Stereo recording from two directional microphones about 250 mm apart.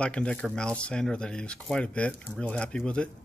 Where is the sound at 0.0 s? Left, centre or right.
Centre.